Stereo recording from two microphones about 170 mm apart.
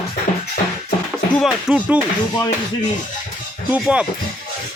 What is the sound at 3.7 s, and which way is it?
Speech, 5° right (ahead or behind).